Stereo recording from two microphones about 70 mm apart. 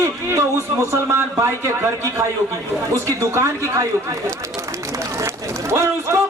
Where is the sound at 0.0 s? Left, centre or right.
Right.